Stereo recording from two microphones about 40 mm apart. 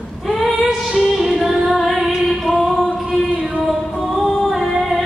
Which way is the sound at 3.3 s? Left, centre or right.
Right.